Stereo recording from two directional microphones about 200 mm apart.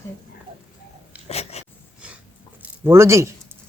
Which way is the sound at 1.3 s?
30° left (ahead or behind).